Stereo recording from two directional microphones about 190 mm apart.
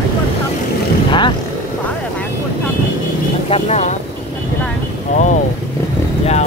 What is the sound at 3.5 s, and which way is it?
Speech, 35° left (ahead or behind).